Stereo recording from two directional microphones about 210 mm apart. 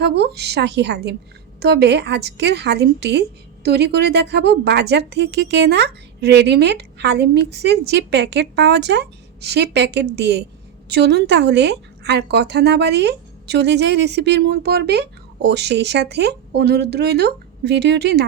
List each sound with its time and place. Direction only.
0.0 s a woman's voice: 50° right (ahead or behind)